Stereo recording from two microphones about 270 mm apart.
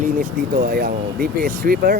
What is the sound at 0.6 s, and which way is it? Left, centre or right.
Speech, right.